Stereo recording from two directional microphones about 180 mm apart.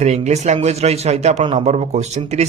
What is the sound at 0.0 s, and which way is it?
A man's voice, 40° right (ahead or behind).